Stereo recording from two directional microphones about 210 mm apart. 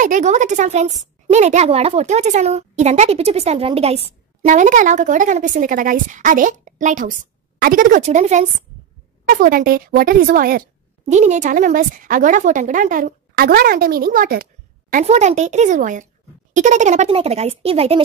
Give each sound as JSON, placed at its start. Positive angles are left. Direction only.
{"t": 0.0, "sound": "a woman's voice", "side_deg": -35}
{"t": 11.1, "sound": "a woman's voice", "side_deg": -35}